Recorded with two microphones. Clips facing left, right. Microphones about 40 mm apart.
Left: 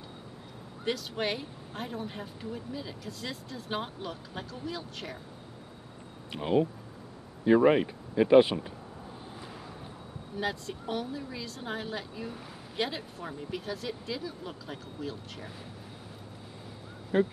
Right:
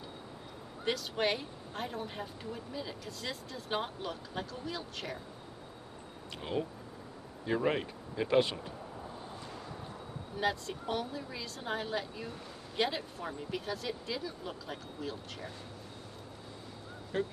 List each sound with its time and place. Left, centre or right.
0.8 s a woman's voice: centre
6.3 s speech: centre
9.3 s a sound: centre
10.3 s a woman's voice: centre
17.1 s speech: centre